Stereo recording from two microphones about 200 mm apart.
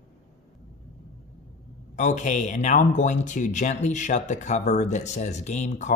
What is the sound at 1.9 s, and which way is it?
Speech, 35° left (ahead or behind).